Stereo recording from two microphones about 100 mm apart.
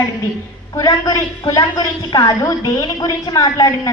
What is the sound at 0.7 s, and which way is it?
A woman's voice, 35° left (ahead or behind).